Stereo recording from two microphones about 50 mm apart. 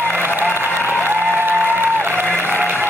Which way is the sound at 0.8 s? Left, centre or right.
Left.